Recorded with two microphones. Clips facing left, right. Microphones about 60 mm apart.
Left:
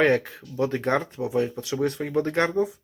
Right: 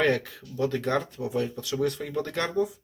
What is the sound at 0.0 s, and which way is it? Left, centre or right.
Speech, left.